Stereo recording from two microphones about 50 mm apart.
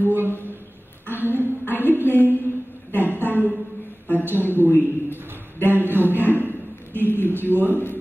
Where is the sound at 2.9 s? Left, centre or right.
Right.